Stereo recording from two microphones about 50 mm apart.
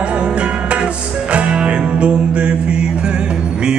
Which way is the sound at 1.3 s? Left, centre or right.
Right.